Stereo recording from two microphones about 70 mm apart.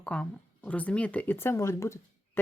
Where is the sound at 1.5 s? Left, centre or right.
Left.